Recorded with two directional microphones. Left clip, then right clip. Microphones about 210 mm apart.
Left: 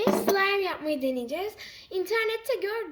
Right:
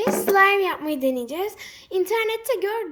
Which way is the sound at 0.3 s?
30° right (ahead or behind).